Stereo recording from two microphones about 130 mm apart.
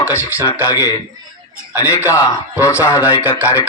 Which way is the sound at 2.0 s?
25° left (ahead or behind).